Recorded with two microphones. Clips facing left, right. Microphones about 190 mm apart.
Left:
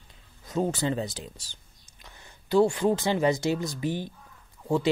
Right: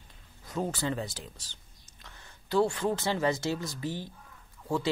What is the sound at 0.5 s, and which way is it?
Speech, 20° left (ahead or behind).